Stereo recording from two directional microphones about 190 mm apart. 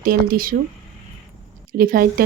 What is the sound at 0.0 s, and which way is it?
Speech, 50° right (ahead or behind).